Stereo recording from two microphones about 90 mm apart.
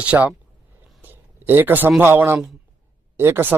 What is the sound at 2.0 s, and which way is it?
Speech, 25° right (ahead or behind).